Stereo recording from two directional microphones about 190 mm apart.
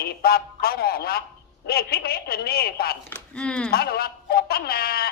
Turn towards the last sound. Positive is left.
turn(degrees=55)  # may be behind; listen again after turning